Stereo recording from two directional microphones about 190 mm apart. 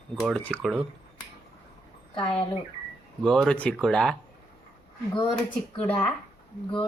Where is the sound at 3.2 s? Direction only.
5° left (ahead or behind).